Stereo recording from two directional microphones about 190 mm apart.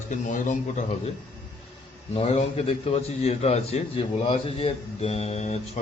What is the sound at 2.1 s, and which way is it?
A man's voice, 30° left (ahead or behind).